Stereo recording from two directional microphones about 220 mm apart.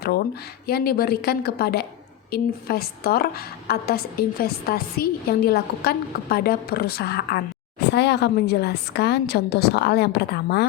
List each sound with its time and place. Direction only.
0.7 s a woman's voice: 45° left (ahead or behind)